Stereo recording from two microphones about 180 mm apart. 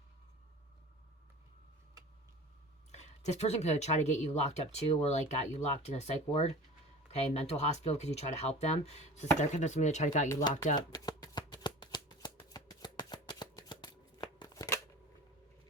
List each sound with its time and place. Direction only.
2.9 s speech: 40° left (ahead or behind)
10.8 s shuffling cards: 20° left (ahead or behind)